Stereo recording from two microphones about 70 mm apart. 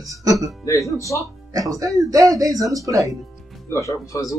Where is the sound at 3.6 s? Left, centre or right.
Left.